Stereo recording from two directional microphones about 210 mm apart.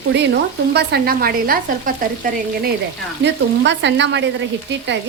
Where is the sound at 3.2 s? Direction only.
55° right (ahead or behind).